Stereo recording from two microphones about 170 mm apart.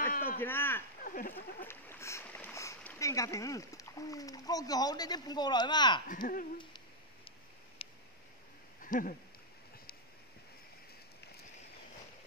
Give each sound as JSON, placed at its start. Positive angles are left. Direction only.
{"t": 0.4, "sound": "speech", "side_deg": 15}
{"t": 1.0, "sound": "speech", "side_deg": 55}
{"t": 1.6, "sound": "speech", "side_deg": 15}
{"t": 6.0, "sound": "speech", "side_deg": 50}
{"t": 7.8, "sound": "a sound", "side_deg": 35}
{"t": 8.8, "sound": "a sound", "side_deg": 55}